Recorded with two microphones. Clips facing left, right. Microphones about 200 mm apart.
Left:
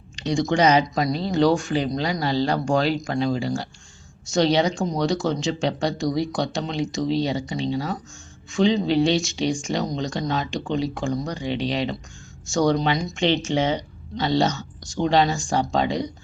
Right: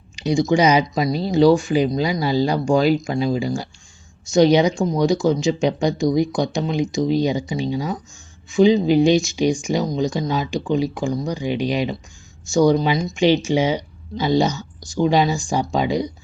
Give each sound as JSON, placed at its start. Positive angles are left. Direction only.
{"t": 0.2, "sound": "speech", "side_deg": -5}